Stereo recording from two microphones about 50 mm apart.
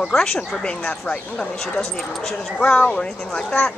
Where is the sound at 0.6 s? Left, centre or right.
Left.